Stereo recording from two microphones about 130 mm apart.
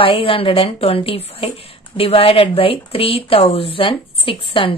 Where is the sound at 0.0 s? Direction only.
45° left (ahead or behind).